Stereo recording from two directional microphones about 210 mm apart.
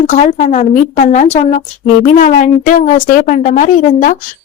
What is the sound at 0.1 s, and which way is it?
A woman's voice, 35° left (ahead or behind).